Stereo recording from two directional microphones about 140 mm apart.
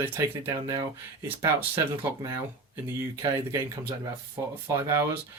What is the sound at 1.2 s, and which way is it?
Speech, 15° right (ahead or behind).